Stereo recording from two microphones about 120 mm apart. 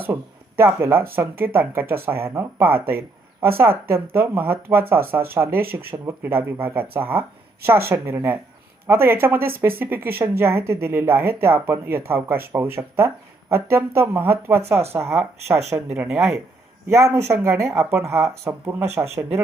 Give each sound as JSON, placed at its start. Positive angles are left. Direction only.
{"t": 0.1, "sound": "speech", "side_deg": -20}
{"t": 16.9, "sound": "speech", "side_deg": -25}